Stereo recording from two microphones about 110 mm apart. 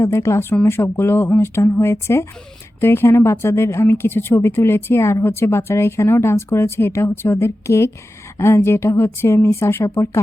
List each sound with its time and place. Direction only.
0.0 s a woman's voice: 25° left (ahead or behind)